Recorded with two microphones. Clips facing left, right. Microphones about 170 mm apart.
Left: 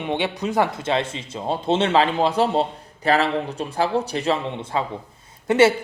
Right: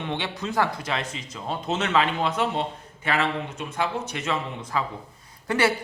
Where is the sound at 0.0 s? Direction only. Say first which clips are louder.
Left 6 dB; 15° left (ahead or behind).